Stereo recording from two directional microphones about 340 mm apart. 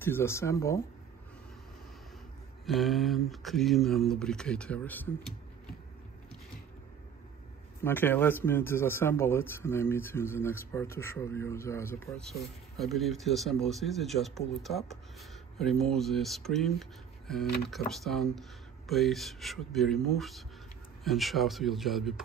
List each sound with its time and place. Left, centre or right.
0.0 s speech: centre
2.6 s a man's voice: centre
7.8 s a man's voice: centre